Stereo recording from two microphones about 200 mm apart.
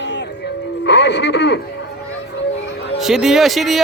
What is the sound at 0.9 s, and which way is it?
Speech, 60° left (ahead or behind).